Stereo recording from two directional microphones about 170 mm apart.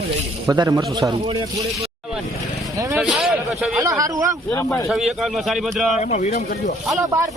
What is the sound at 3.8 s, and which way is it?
Speech, 20° right (ahead or behind).